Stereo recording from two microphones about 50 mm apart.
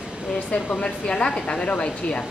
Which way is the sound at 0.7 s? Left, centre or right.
Left.